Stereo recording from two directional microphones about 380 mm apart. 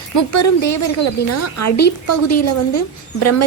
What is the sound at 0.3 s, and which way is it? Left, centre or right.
A woman's voice, left.